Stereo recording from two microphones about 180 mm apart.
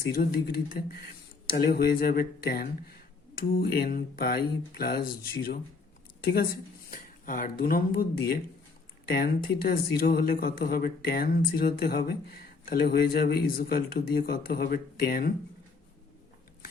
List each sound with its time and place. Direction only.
0.1 s speech: 60° left (ahead or behind)
6.9 s speech: 50° left (ahead or behind)